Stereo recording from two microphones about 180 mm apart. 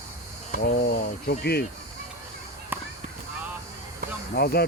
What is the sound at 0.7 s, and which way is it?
Speech, 60° left (ahead or behind).